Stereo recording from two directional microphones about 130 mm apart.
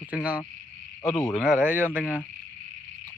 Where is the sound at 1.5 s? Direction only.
15° right (ahead or behind).